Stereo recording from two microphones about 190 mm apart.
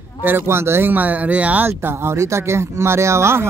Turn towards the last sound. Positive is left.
turn(degrees=-15)  # may be behind; listen again after turning